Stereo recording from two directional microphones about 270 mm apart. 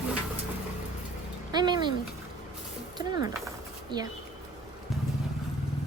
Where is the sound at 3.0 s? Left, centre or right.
Centre.